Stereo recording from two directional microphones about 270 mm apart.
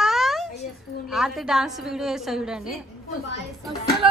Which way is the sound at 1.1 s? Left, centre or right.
Centre.